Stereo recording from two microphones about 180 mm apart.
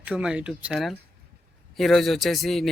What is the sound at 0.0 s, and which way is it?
Speech, 5° right (ahead or behind).